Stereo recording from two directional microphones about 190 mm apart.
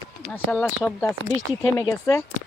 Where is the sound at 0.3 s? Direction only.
5° left (ahead or behind).